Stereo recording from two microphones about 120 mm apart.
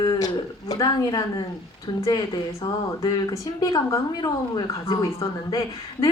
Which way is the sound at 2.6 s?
35° left (ahead or behind).